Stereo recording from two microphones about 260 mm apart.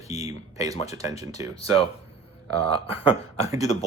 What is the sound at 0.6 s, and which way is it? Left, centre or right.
Speech, centre.